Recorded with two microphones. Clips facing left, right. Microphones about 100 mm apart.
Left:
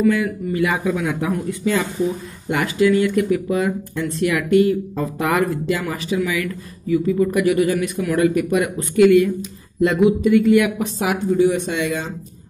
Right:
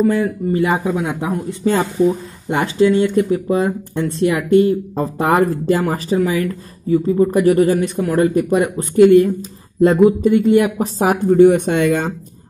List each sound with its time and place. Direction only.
0.0 s speech: 35° right (ahead or behind)
1.6 s speech: 35° right (ahead or behind)